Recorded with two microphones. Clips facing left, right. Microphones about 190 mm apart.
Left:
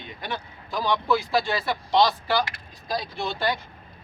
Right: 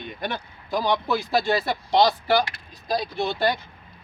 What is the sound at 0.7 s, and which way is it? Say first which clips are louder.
Speech: right 2 dB; 15° right (ahead or behind).